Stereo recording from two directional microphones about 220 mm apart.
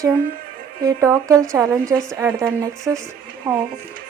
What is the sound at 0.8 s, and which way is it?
Speech, 15° right (ahead or behind).